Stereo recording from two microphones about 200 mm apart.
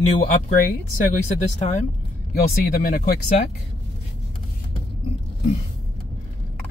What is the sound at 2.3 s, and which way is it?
Speech, 50° left (ahead or behind).